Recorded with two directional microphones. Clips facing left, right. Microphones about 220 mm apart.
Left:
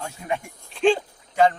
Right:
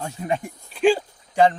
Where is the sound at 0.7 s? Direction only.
5° right (ahead or behind).